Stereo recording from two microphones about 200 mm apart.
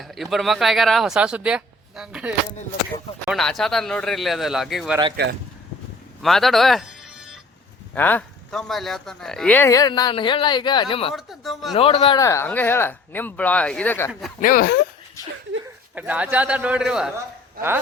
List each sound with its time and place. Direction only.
0.0 s speech: centre (ahead or behind)
5.2 s speech: 55° right (ahead or behind)
6.2 s speech: centre (ahead or behind)
7.9 s speech: 10° left (ahead or behind); by 11.1 s 25° left (ahead or behind)
11.1 s speech: centre (ahead or behind)
11.8 s speech: 25° left (ahead or behind); by 14.3 s centre (ahead or behind)
14.4 s speech: 45° left (ahead or behind)
15.6 s speech: 10° right (ahead or behind)